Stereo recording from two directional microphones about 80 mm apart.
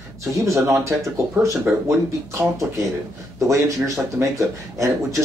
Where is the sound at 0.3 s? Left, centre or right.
Right.